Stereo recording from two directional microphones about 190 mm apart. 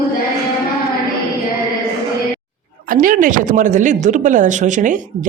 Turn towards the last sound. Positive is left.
turn(degrees=-40)  # may be behind; listen again after turning